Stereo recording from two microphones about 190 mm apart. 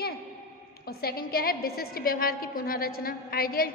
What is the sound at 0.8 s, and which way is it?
A woman's voice, 55° left (ahead or behind).